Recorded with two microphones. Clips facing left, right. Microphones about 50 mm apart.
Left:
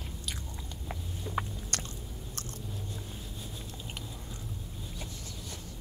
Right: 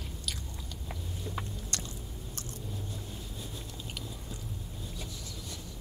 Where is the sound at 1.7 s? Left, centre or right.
Left.